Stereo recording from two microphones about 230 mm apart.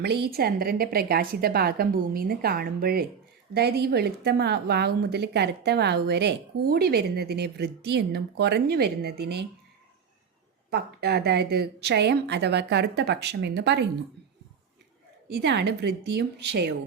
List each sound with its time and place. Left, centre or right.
0.0 s a woman's voice: right
10.7 s a woman's voice: right
15.4 s a woman's voice: right